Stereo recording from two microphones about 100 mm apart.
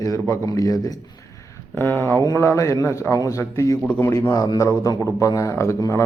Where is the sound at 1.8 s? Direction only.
20° left (ahead or behind).